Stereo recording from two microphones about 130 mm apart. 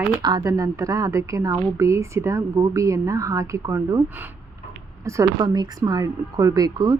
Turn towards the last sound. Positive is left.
turn(degrees=-25)  # may be behind; listen again after turning